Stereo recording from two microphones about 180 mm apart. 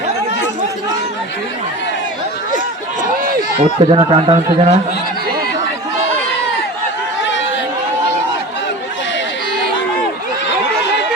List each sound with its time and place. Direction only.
3.6 s speech: 30° right (ahead or behind)